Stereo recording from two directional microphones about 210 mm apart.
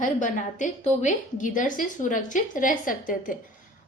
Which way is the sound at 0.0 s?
40° left (ahead or behind).